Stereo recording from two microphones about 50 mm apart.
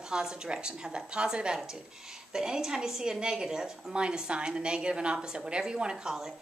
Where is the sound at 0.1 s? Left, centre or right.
Centre.